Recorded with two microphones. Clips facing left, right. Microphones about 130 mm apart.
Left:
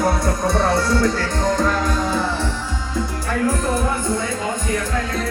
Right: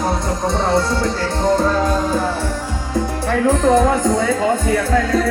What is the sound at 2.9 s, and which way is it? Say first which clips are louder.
Music: right 5 dB; 70° right (ahead or behind).